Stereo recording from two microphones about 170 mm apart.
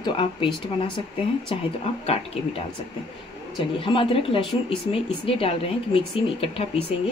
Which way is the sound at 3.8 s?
30° left (ahead or behind).